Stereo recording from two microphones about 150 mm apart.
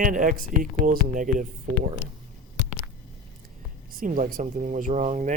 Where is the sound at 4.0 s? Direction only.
65° right (ahead or behind).